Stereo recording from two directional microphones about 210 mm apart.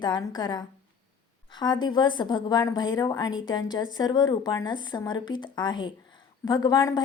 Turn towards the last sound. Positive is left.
turn(degrees=20)  # may be behind; listen again after turning